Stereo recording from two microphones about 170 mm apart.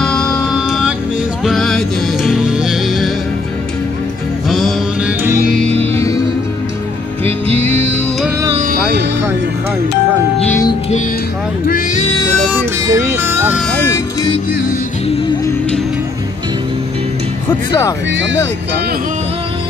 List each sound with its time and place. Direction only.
0.0 s music: 5° left (ahead or behind)
4.5 s music: centre (ahead or behind)
7.2 s music: 35° right (ahead or behind)
11.6 s music: 50° left (ahead or behind)
12.8 s music: 15° right (ahead or behind)
13.6 s music: 5° left (ahead or behind)
18.1 s speech: 90° right